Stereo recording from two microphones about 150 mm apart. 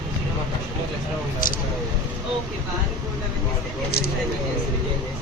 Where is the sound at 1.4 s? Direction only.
65° left (ahead or behind).